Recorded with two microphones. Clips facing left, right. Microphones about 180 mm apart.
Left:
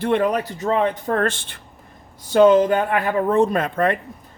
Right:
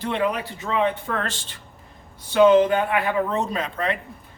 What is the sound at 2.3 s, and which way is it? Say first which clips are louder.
Speech: left 2 dB; 45° left (ahead or behind).